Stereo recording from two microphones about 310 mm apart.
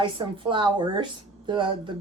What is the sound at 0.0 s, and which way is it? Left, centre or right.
Speech, centre.